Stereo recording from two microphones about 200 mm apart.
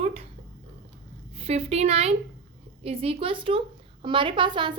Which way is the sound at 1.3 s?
30° right (ahead or behind).